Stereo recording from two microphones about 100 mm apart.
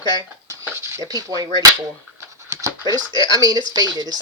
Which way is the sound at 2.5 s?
25° right (ahead or behind).